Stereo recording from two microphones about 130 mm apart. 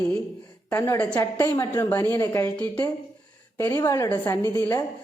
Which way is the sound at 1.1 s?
20° left (ahead or behind).